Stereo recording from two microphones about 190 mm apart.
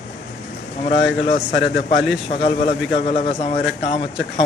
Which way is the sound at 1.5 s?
75° left (ahead or behind).